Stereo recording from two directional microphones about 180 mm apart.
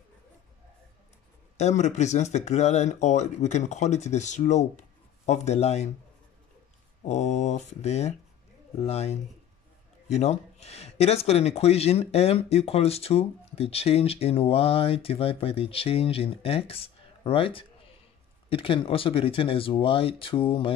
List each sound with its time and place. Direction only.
1.6 s speech: 40° left (ahead or behind)
7.1 s speech: 40° left (ahead or behind)